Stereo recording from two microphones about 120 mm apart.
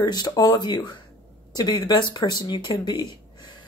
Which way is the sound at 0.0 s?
35° left (ahead or behind).